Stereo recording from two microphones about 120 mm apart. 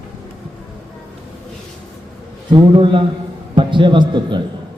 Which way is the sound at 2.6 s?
45° right (ahead or behind).